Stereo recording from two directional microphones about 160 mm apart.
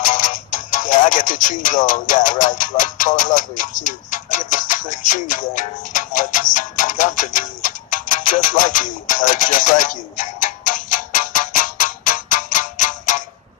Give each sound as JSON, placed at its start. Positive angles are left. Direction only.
{"t": 0.0, "sound": "music", "side_deg": 55}